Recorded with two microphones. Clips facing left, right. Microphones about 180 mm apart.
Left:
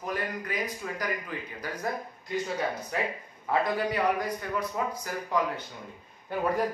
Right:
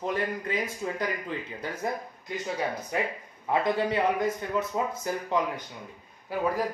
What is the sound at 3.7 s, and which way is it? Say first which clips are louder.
Speech: right 1 dB; 25° right (ahead or behind).